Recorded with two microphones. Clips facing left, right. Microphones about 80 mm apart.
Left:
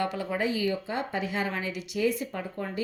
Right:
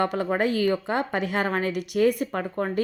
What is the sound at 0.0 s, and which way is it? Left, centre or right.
A woman's voice, right.